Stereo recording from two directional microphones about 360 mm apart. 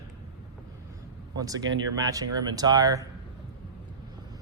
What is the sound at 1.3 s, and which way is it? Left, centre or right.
Speech, centre.